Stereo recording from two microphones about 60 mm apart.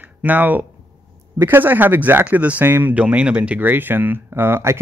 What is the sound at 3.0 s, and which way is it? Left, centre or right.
Speech, centre.